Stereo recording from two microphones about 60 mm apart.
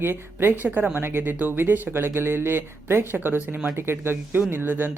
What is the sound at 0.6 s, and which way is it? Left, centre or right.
Speech, right.